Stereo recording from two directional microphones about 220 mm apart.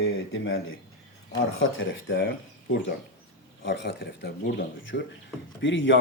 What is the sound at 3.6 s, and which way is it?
A man's voice, 50° left (ahead or behind).